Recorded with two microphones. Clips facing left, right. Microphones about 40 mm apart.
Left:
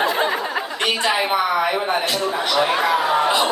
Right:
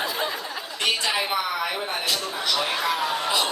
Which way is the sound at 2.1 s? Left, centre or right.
Left.